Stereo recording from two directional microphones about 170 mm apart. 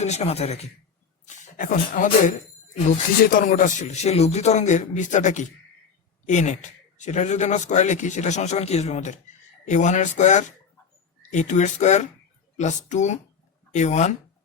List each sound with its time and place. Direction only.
0.0 s speech: 40° left (ahead or behind)
1.5 s speech: 55° left (ahead or behind)